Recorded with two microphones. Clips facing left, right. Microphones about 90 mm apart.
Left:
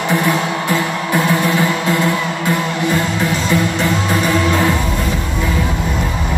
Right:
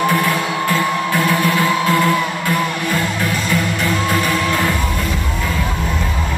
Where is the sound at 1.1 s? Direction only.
20° left (ahead or behind).